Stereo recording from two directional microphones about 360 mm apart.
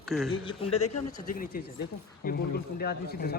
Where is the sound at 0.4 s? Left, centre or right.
Centre.